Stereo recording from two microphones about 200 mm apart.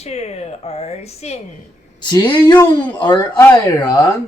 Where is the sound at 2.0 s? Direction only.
20° left (ahead or behind).